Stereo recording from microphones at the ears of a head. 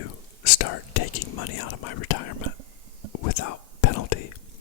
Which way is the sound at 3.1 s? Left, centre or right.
Left.